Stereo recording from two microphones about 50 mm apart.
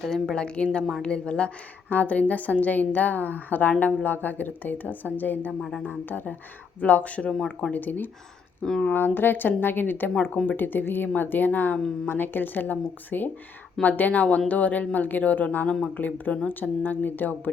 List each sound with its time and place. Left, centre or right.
0.0 s a woman's voice: centre
0.3 s a woman's voice: left
1.9 s a woman's voice: left
7.2 s a woman's voice: centre
7.7 s a woman's voice: left
8.6 s a woman's voice: centre
8.9 s a woman's voice: left